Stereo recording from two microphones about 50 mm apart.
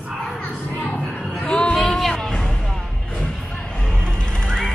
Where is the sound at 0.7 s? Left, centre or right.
Left.